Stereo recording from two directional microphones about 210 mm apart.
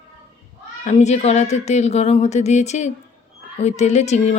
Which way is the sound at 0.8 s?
35° left (ahead or behind).